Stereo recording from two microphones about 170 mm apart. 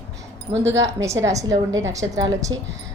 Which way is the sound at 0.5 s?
90° right.